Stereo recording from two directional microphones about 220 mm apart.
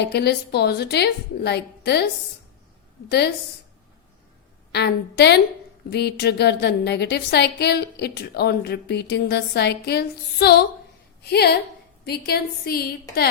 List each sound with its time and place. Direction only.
0.1 s a woman's voice: 45° left (ahead or behind)
3.1 s a woman's voice: 50° left (ahead or behind)
4.7 s a woman's voice: 50° left (ahead or behind)